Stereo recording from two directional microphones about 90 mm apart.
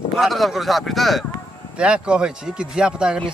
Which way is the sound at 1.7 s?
10° right (ahead or behind).